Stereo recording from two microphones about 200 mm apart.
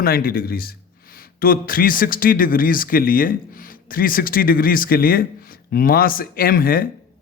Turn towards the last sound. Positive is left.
turn(degrees=45)  # may be behind; listen again after turning